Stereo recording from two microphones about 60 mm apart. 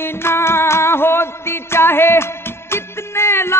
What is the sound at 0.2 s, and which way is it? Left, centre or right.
Music, left.